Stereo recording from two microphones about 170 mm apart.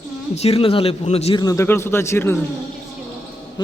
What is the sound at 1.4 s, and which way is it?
Speech, 20° left (ahead or behind).